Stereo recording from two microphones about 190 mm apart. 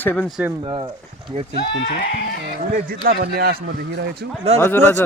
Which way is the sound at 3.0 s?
55° right (ahead or behind).